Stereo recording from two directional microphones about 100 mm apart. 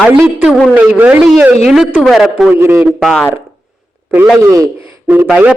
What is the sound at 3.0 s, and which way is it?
Speech, centre (ahead or behind).